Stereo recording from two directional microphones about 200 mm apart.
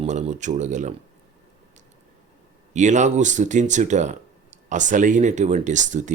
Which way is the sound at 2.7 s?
35° right (ahead or behind).